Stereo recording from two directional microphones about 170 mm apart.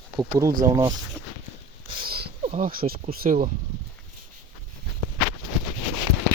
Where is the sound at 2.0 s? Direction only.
65° right (ahead or behind).